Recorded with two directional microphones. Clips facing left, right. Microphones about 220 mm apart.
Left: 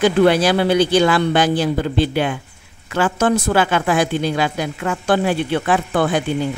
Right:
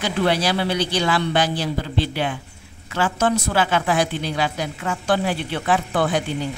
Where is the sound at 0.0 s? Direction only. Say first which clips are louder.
Left 7 dB; 50° left (ahead or behind).